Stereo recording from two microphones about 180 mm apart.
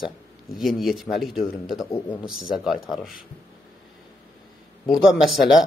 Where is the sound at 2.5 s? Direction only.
Centre (ahead or behind).